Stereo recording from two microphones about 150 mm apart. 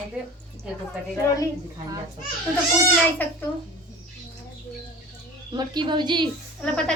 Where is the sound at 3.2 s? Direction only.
10° left (ahead or behind).